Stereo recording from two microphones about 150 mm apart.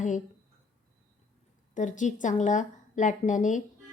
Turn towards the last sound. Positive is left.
turn(degrees=55)  # may be behind; listen again after turning